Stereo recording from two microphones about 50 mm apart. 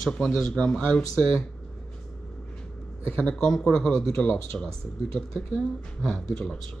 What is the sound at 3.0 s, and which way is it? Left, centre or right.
Speech, left.